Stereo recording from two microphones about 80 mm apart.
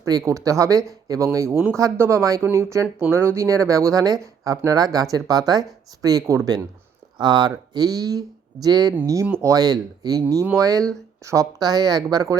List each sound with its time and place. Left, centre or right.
0.0 s speech: right
7.2 s speech: right